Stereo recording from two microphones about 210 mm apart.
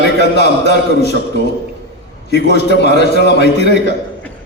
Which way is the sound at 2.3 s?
55° left (ahead or behind).